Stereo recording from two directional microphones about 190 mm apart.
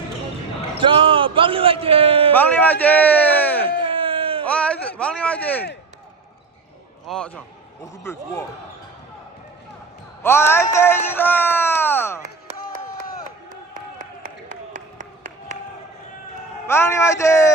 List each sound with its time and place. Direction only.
0.8 s speech: 25° right (ahead or behind)
2.3 s a man's voice: 10° left (ahead or behind)
3.8 s a sound: 30° right (ahead or behind)
4.4 s speech: 5° left (ahead or behind)
7.1 s a man's voice: 5° left (ahead or behind)
10.2 s speech: 10° left (ahead or behind)
16.6 s speech: 15° left (ahead or behind)